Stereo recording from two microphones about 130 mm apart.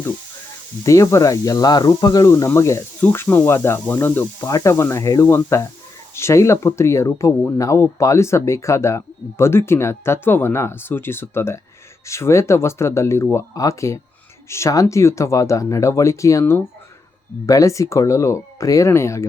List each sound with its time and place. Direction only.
0.9 s speech: 25° left (ahead or behind)